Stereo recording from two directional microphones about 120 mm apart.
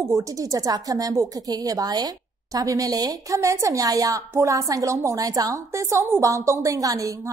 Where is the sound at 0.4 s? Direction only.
30° right (ahead or behind).